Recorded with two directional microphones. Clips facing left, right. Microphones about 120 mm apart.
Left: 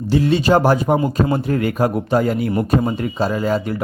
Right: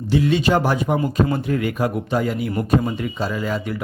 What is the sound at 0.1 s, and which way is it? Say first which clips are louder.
A man's voice: left 3 dB; 35° left (ahead or behind).